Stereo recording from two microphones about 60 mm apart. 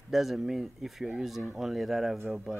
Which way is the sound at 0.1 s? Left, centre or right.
Centre.